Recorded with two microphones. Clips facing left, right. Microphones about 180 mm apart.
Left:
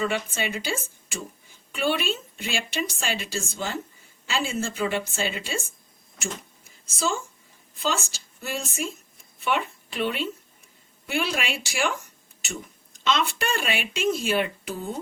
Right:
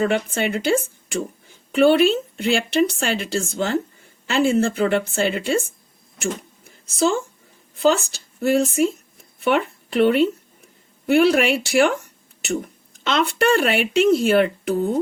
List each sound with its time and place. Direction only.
0.0 s a woman's voice: 60° right (ahead or behind)
6.2 s a sound: 60° right (ahead or behind)
7.8 s a woman's voice: 60° right (ahead or behind)